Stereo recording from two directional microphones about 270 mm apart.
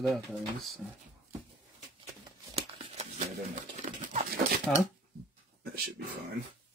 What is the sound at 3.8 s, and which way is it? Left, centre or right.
Horse, right.